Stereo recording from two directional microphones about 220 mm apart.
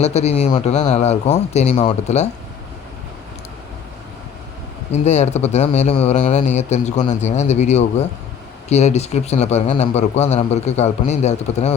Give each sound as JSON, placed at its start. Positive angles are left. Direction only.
{"t": 0.0, "sound": "speech", "side_deg": 30}
{"t": 4.9, "sound": "a man's voice", "side_deg": 30}